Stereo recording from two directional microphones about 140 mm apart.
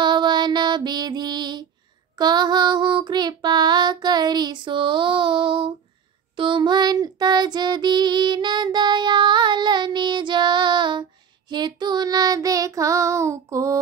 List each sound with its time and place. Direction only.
0.0 s music: 35° right (ahead or behind)
2.1 s child singing: 30° right (ahead or behind)